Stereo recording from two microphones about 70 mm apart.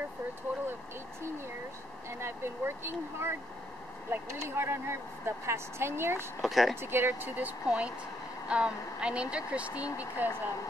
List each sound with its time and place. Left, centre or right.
2.0 s speech: right
6.4 s speech: centre
6.8 s speech: right
7.6 s speech: centre